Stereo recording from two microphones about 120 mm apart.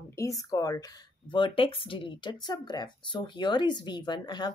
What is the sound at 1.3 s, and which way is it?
Speech, 45° left (ahead or behind).